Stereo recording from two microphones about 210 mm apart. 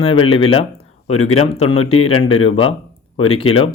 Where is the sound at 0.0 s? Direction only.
25° left (ahead or behind).